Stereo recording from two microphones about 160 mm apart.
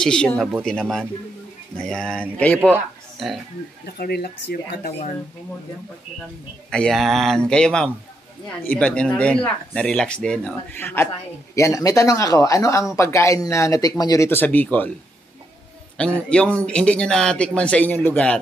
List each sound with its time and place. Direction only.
0.0 s speech: 5° left (ahead or behind)
3.8 s speech: 75° left (ahead or behind)
6.7 s speech: 5° left (ahead or behind)
16.0 s speech: 5° left (ahead or behind)